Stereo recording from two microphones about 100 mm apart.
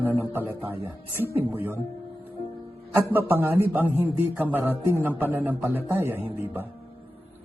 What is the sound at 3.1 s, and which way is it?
A man's voice, 20° right (ahead or behind).